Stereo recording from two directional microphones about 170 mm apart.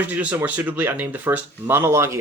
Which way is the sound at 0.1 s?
10° right (ahead or behind).